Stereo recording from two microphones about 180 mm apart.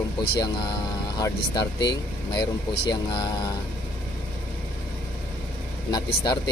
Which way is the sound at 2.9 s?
25° left (ahead or behind).